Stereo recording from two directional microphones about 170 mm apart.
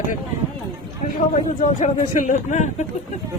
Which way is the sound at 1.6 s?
45° left (ahead or behind).